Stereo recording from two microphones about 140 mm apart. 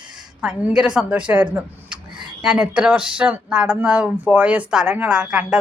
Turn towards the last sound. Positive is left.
turn(degrees=-10)  # may be behind; listen again after turning